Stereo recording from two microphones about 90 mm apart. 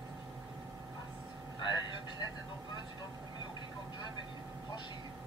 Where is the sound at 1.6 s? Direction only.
55° left (ahead or behind).